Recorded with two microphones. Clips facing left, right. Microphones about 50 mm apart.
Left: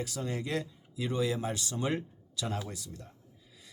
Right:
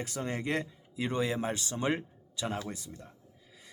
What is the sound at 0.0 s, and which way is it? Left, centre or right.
A man's voice, right.